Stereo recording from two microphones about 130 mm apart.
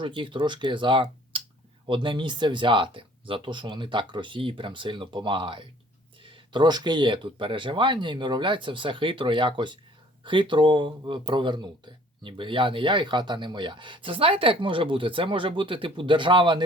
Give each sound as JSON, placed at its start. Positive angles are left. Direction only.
{"t": 0.0, "sound": "speech", "side_deg": -40}